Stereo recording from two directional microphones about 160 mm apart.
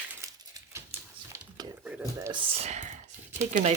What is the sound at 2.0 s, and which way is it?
Speech, 20° right (ahead or behind).